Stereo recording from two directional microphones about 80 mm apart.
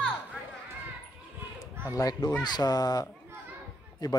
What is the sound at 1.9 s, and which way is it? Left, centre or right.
Speech, left.